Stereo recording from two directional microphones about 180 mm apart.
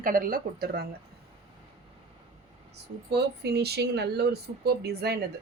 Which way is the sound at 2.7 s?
65° right (ahead or behind).